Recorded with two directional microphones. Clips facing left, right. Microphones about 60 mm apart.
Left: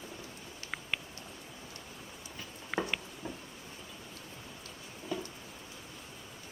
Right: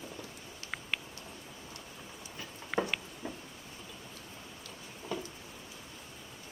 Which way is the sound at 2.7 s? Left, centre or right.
Centre.